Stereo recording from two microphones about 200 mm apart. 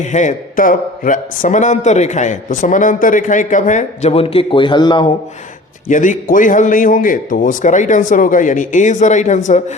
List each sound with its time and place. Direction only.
0.0 s a man's voice: 35° left (ahead or behind)
5.9 s a man's voice: 40° left (ahead or behind)